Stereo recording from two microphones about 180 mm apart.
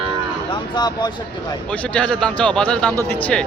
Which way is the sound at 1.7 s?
5° left (ahead or behind).